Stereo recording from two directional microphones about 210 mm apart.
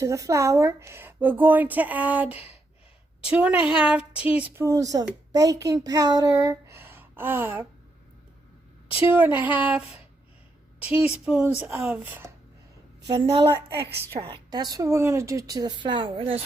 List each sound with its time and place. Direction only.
0.0 s a woman's voice: 15° right (ahead or behind)
9.1 s a woman's voice: 10° right (ahead or behind)
10.8 s a woman's voice: 5° right (ahead or behind)
13.1 s a woman's voice: 20° right (ahead or behind)